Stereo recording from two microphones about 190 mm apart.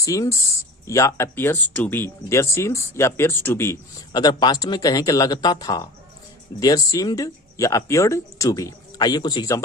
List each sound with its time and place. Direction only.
0.0 s speech: 15° left (ahead or behind)